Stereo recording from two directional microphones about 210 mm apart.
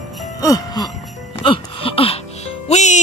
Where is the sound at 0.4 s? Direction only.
15° left (ahead or behind).